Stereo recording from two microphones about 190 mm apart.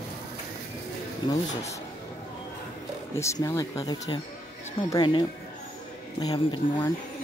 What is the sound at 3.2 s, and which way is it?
Speech, 15° left (ahead or behind).